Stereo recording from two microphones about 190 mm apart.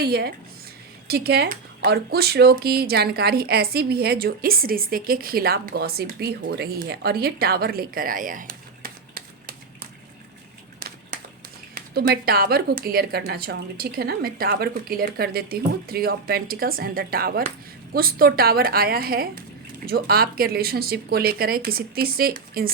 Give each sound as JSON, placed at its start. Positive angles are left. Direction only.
{"t": 0.0, "sound": "speech", "side_deg": -55}
{"t": 10.8, "sound": "a sound", "side_deg": -50}
{"t": 11.7, "sound": "speech", "side_deg": -55}